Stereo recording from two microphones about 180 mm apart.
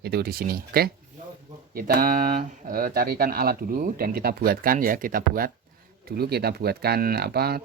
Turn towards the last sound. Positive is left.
turn(degrees=-60)  # may be behind; listen again after turning